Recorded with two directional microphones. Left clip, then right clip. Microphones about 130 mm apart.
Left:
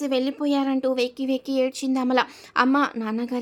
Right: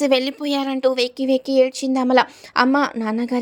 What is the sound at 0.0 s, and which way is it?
Speech, 55° right (ahead or behind).